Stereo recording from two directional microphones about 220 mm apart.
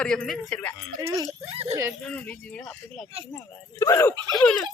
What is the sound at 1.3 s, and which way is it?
Speech, 30° right (ahead or behind).